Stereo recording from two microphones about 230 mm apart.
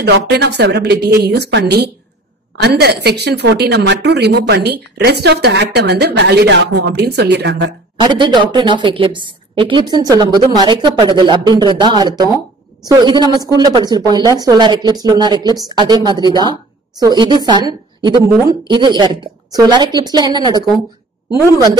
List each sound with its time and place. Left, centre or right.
0.0 s a woman's voice: right
8.0 s a woman's voice: centre